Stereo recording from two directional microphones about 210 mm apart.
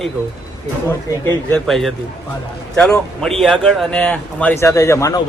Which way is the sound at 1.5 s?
Centre (ahead or behind).